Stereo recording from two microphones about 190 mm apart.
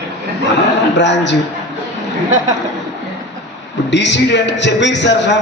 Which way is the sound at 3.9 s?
70° left (ahead or behind).